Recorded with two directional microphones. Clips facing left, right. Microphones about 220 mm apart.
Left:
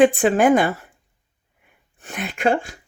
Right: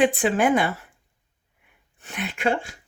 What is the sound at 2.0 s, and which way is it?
Speech, 45° left (ahead or behind).